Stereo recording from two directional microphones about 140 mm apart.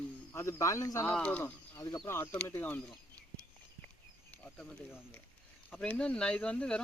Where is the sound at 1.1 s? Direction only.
10° left (ahead or behind).